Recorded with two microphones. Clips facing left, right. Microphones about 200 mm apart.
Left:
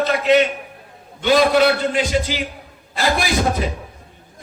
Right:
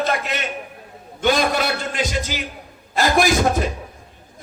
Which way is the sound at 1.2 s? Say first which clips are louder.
Left 5 dB; 45° right (ahead or behind).